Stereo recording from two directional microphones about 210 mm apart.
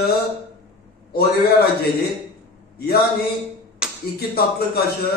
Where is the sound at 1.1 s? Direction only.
45° left (ahead or behind).